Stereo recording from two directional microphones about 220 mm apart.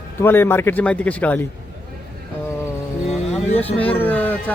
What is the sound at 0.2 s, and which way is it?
Speech, 10° left (ahead or behind).